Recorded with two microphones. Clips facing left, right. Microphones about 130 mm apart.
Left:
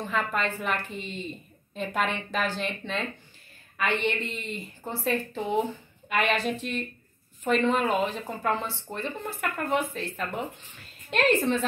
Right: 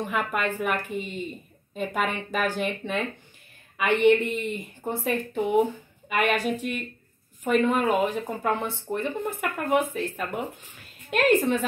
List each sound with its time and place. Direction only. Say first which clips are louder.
0.0 s a woman's voice: right 1 dB; 15° right (ahead or behind)